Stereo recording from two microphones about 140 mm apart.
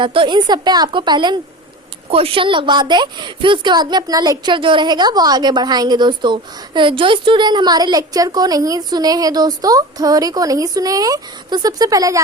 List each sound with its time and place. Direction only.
0.0 s a woman's voice: 35° right (ahead or behind)
2.0 s a woman's voice: 40° right (ahead or behind); by 12.2 s 25° right (ahead or behind)